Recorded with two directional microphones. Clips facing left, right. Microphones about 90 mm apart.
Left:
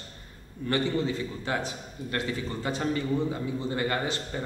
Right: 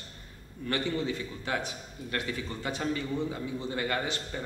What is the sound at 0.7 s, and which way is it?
A man's voice, 35° left (ahead or behind).